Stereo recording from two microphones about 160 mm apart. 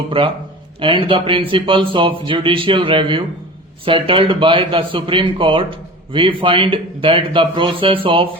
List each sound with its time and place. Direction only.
0.1 s a man's voice: 35° right (ahead or behind)